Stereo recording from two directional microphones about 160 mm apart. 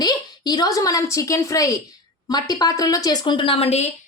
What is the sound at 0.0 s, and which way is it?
A woman's voice, 25° left (ahead or behind).